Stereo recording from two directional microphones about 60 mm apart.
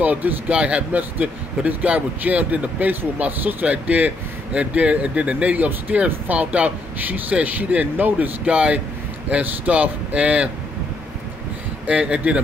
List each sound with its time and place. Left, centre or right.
0.0 s speech: right
11.9 s speech: centre